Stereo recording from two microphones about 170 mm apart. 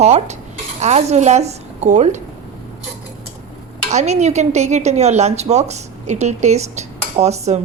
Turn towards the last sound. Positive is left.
turn(degrees=-40)  # may be behind; listen again after turning